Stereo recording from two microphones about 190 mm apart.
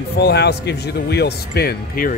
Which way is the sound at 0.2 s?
60° left (ahead or behind).